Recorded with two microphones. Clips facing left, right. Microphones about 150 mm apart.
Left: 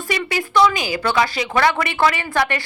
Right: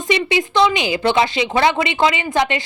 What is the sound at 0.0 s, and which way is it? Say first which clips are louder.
Speech: right 5 dB; 20° right (ahead or behind).